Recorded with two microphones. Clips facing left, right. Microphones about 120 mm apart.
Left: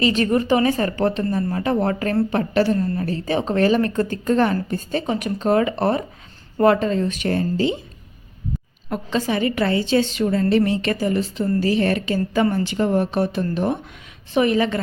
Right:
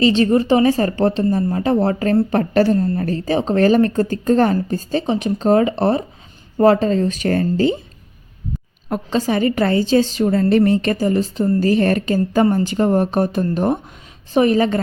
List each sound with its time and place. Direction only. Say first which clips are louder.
0.0 s a woman's voice: right 4 dB; 30° right (ahead or behind)
2.4 s a woman's voice: right 3 dB; 45° right (ahead or behind)
8.9 s a woman's voice: right 3 dB; 40° right (ahead or behind)